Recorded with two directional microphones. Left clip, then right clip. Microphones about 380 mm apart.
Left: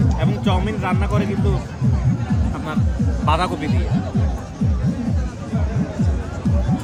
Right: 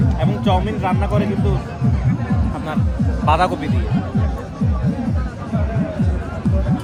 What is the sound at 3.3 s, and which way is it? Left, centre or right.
Speech, centre.